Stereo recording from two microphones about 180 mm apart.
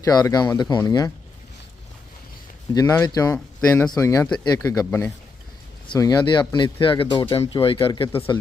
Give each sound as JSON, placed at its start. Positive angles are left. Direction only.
{"t": 0.0, "sound": "speech", "side_deg": 20}
{"t": 3.0, "sound": "speech", "side_deg": 20}
{"t": 3.3, "sound": "speech", "side_deg": 10}
{"t": 5.9, "sound": "speech", "side_deg": 25}